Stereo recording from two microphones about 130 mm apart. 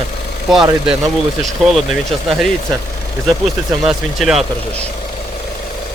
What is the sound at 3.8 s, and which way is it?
Speech, centre (ahead or behind).